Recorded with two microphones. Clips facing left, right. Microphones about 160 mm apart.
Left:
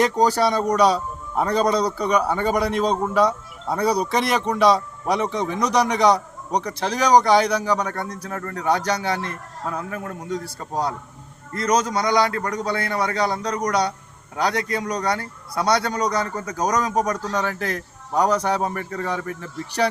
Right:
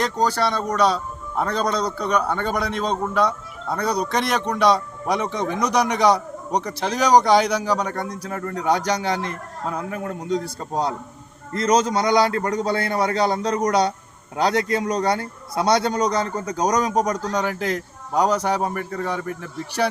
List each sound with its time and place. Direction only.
0.0 s a man's voice: 15° left (ahead or behind); by 19.9 s 5° right (ahead or behind)